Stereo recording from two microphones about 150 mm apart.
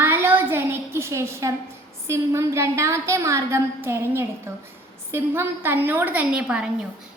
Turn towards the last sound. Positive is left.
turn(degrees=-10)  # may be behind; listen again after turning